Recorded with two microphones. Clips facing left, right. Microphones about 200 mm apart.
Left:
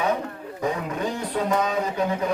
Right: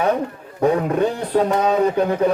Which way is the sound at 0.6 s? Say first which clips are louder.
Right 9 dB; 60° right (ahead or behind).